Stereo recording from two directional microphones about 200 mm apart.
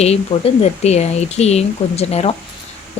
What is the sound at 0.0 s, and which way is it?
Speech, 30° left (ahead or behind).